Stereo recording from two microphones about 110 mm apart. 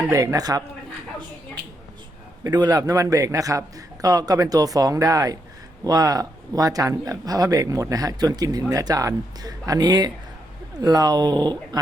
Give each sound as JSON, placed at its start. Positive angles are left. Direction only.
{"t": 0.1, "sound": "speech", "side_deg": -30}
{"t": 2.4, "sound": "speech", "side_deg": -40}